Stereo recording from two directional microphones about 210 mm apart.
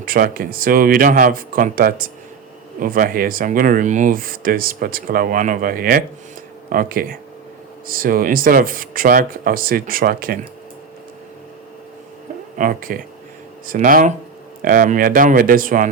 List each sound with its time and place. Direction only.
0.0 s speech: 45° right (ahead or behind)
12.5 s speech: 40° right (ahead or behind)